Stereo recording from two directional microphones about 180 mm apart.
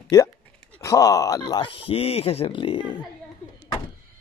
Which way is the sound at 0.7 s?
15° left (ahead or behind).